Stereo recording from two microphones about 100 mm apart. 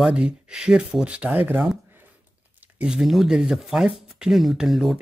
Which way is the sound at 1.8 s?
20° right (ahead or behind).